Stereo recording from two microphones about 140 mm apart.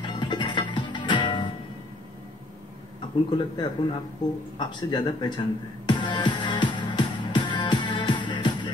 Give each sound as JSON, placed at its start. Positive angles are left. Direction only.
{"t": 0.0, "sound": "music", "side_deg": 35}
{"t": 3.3, "sound": "a man's voice", "side_deg": 35}
{"t": 5.9, "sound": "music", "side_deg": 35}